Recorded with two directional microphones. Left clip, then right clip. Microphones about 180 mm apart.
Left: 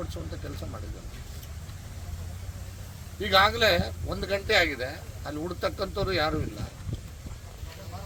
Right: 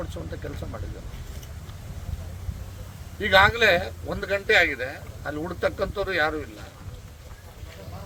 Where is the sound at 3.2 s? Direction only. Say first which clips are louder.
Right 4 dB; 5° right (ahead or behind).